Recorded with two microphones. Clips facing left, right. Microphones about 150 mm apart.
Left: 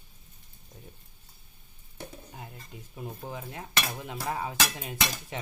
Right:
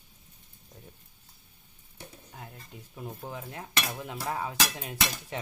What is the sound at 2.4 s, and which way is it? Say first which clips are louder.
Speech: right 3 dB; 5° left (ahead or behind).